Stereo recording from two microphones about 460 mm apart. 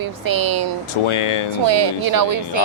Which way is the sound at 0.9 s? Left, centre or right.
Left.